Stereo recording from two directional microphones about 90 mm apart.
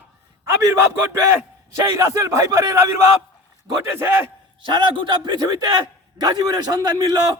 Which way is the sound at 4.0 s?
30° right (ahead or behind).